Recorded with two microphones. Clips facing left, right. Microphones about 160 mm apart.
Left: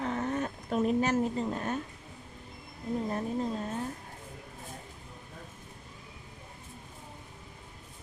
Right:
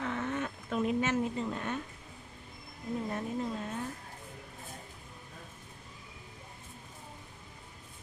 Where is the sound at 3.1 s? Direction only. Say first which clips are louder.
Left 3 dB; 35° left (ahead or behind).